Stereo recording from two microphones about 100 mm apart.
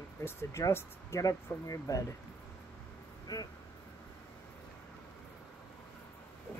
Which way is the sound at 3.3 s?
35° left (ahead or behind).